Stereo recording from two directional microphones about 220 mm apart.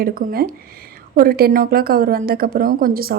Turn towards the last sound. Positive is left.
turn(degrees=-40)  # may be behind; listen again after turning